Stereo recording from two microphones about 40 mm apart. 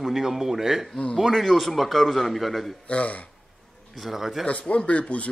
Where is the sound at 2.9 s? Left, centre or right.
Left.